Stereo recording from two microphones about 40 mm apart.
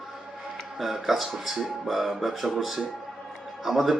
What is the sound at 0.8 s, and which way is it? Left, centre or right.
Speech, centre.